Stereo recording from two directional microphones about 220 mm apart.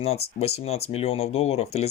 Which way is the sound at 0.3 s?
30° left (ahead or behind).